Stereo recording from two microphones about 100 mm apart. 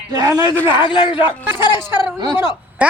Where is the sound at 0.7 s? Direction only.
50° left (ahead or behind).